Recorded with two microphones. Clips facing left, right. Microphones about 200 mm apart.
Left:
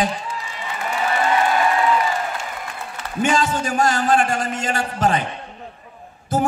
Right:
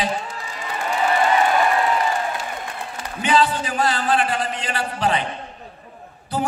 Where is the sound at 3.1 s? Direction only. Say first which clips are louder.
Even; 45° left (ahead or behind).